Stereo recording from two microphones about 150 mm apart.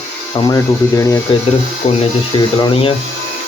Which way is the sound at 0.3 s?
25° left (ahead or behind).